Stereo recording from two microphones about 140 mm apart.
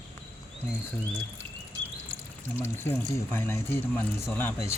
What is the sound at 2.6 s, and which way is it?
Speech, 15° left (ahead or behind).